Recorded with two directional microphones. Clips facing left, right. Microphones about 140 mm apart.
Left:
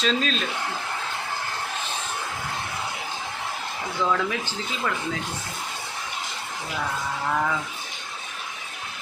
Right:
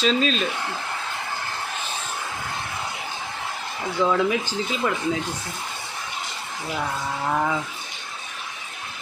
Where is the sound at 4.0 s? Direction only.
20° right (ahead or behind).